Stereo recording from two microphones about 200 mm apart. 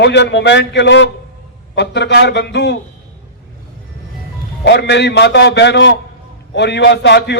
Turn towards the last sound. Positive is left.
turn(degrees=55)  # may be behind; listen again after turning